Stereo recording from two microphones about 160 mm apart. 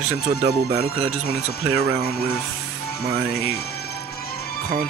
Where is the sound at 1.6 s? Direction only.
15° right (ahead or behind).